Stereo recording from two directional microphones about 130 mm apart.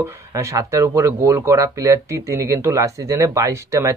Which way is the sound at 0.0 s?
25° right (ahead or behind).